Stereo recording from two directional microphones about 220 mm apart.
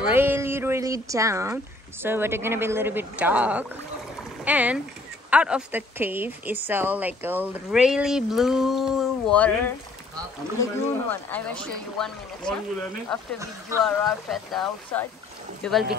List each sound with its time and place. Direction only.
0.0 s a woman's voice: 10° right (ahead or behind)